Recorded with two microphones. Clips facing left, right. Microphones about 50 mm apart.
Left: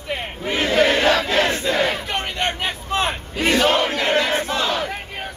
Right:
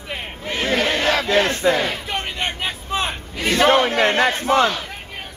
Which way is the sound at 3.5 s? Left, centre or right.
Right.